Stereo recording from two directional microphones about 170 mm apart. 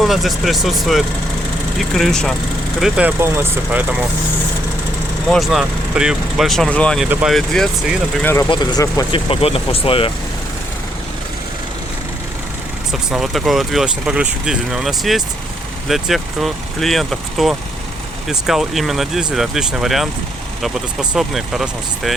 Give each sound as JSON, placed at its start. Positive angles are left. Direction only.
{"t": 0.0, "sound": "speech", "side_deg": 0}
{"t": 5.3, "sound": "speech", "side_deg": 0}
{"t": 8.4, "sound": "speech", "side_deg": 25}
{"t": 9.1, "sound": "speech", "side_deg": 35}
{"t": 12.9, "sound": "speech", "side_deg": 0}